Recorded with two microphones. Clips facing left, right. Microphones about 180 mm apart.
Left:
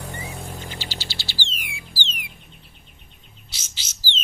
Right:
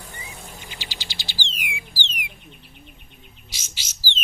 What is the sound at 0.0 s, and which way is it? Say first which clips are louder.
Mechanisms: left 7 dB; 65° left (ahead or behind).